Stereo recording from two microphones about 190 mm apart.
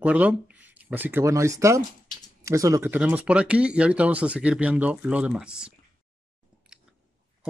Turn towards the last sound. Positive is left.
turn(degrees=-5)  # may be behind; listen again after turning